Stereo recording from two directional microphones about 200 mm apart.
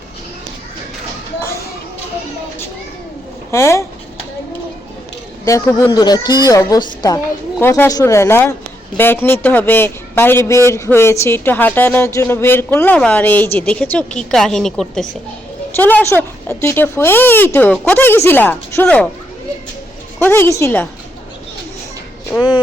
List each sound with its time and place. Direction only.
3.5 s a man's voice: 15° left (ahead or behind)
5.5 s a woman's voice: 15° left (ahead or behind)
20.1 s a man's voice: 10° left (ahead or behind)
22.3 s a man's voice: 15° left (ahead or behind)